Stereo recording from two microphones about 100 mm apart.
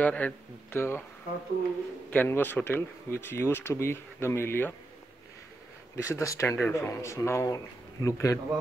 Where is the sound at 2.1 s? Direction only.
20° left (ahead or behind).